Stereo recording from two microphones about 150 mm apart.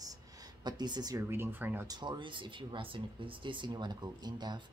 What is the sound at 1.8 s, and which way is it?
Speech, 25° right (ahead or behind).